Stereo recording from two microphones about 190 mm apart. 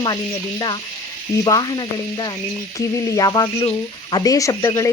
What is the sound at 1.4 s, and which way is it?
Speech, 20° left (ahead or behind).